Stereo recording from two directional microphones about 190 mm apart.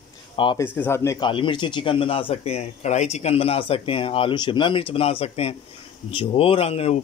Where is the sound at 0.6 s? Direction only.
10° left (ahead or behind).